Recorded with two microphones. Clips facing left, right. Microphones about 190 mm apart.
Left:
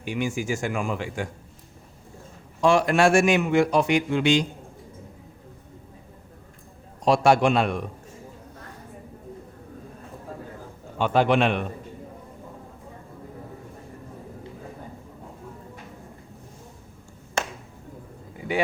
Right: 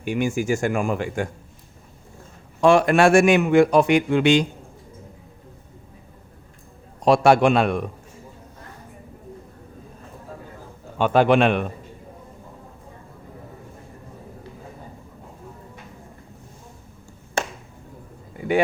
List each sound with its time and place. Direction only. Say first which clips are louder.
0.0 s a man's voice: right 4 dB; 50° right (ahead or behind)
2.6 s a man's voice: right 4 dB; 55° right (ahead or behind)
7.0 s a man's voice: right 3 dB; 60° right (ahead or behind)
10.9 s a man's voice: right 4 dB; 55° right (ahead or behind)